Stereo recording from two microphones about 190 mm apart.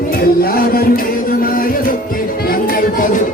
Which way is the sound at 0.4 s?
50° left (ahead or behind).